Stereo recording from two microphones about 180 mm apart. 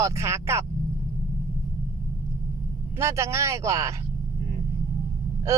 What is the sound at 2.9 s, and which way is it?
Speech, 15° right (ahead or behind).